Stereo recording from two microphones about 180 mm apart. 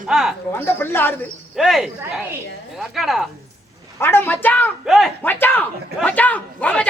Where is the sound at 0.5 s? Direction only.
10° left (ahead or behind).